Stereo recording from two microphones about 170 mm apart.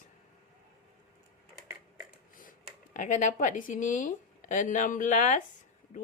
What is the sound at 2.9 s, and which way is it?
A woman's voice, 50° left (ahead or behind).